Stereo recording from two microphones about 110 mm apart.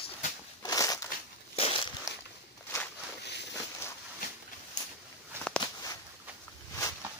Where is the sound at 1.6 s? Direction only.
55° left (ahead or behind).